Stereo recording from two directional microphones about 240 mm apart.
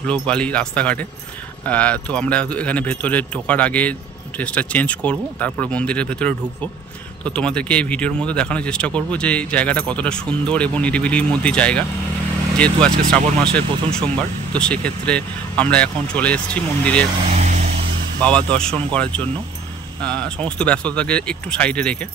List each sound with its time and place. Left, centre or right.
0.1 s speech: centre
13.1 s speech: centre
17.3 s vehicle: right
18.2 s speech: centre
20.0 s speech: centre